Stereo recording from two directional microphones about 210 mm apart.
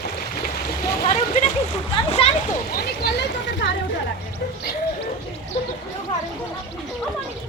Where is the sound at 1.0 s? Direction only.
30° left (ahead or behind).